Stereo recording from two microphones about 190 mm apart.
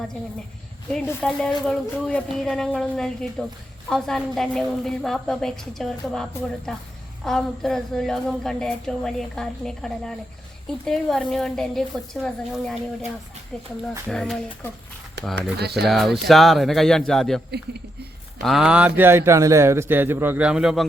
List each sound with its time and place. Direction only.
1.0 s speech: 5° left (ahead or behind)
14.1 s speech: 5° left (ahead or behind)
15.5 s speech: 60° right (ahead or behind)
15.9 s speech: centre (ahead or behind)
18.4 s speech: 5° right (ahead or behind)